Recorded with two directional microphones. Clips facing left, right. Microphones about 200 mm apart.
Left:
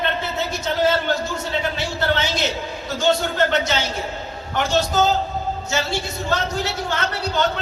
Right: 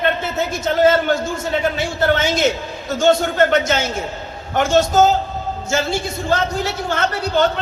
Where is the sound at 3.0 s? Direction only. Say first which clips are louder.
Right 5 dB; 50° right (ahead or behind).